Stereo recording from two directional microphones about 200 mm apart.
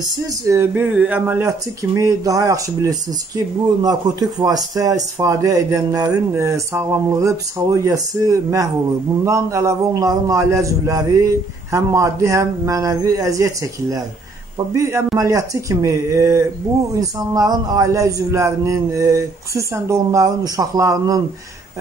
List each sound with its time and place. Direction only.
0.5 s speech: 10° right (ahead or behind)